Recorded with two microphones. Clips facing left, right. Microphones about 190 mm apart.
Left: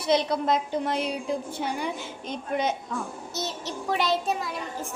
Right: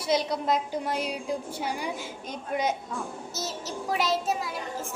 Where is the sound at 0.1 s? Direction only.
10° right (ahead or behind).